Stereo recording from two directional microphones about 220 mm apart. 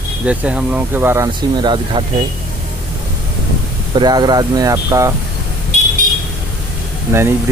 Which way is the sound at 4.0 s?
20° right (ahead or behind).